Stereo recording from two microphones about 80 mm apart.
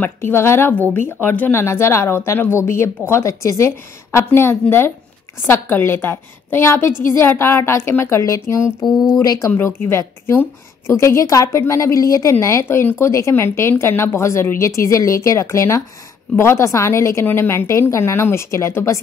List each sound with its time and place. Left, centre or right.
0.0 s a woman's voice: left
1.5 s a woman's voice: left
9.2 s speech: left
9.5 s a woman's voice: left